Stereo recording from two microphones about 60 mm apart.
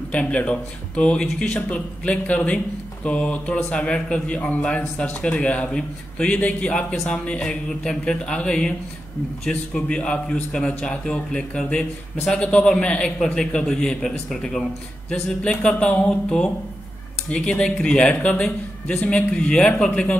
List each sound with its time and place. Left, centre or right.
0.1 s a man's voice: left